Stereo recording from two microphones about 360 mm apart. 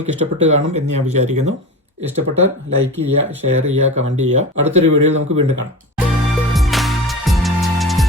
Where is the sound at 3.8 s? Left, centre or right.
Centre.